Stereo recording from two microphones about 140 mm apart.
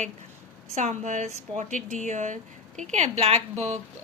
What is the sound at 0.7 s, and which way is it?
A woman's voice, 60° right (ahead or behind).